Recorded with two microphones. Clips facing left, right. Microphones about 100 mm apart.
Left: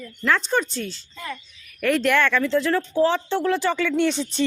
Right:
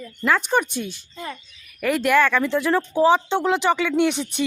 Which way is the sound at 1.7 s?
5° right (ahead or behind).